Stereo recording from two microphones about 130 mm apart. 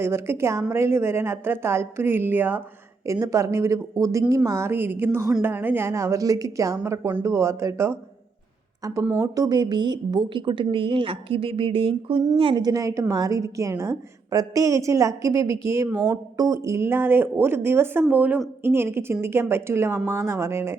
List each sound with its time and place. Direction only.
0.0 s a woman's voice: 20° right (ahead or behind)